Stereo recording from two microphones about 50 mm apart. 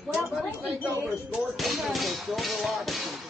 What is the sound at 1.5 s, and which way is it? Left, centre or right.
Music, centre.